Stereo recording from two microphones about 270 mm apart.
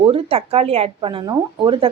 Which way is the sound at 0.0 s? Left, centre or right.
Right.